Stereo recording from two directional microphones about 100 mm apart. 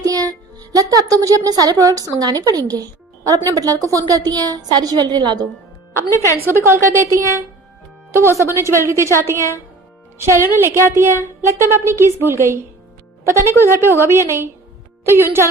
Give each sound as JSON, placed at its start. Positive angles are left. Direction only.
{"t": 0.0, "sound": "speech", "side_deg": -40}
{"t": 6.4, "sound": "speech", "side_deg": -25}
{"t": 10.2, "sound": "speech", "side_deg": -25}